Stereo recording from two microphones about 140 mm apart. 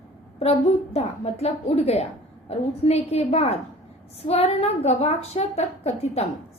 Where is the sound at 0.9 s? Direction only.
45° left (ahead or behind).